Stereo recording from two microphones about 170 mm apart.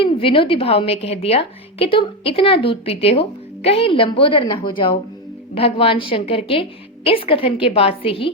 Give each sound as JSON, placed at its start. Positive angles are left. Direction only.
{"t": 0.0, "sound": "a woman's voice", "side_deg": 35}